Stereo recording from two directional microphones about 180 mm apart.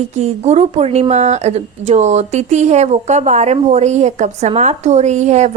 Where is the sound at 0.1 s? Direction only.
40° right (ahead or behind).